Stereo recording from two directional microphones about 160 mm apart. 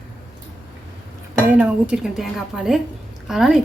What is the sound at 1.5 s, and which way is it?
Speech, 10° right (ahead or behind).